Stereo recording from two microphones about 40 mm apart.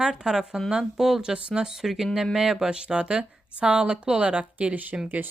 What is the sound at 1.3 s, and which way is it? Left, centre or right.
Speech, right.